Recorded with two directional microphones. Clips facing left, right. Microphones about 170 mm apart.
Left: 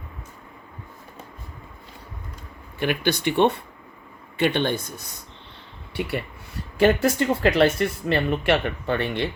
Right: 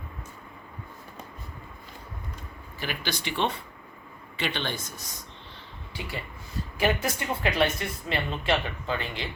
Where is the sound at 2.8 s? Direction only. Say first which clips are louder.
Left 10 dB; 60° left (ahead or behind).